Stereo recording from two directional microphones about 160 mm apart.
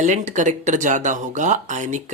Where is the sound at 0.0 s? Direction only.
50° right (ahead or behind).